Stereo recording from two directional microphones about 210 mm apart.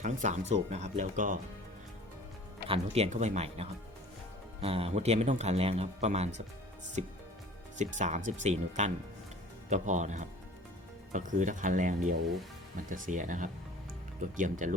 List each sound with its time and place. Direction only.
0.0 s speech: 35° right (ahead or behind)
2.6 s speech: 30° right (ahead or behind)
7.8 s speech: 35° right (ahead or behind)